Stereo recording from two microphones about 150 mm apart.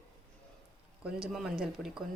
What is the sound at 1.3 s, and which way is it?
Speech, centre (ahead or behind).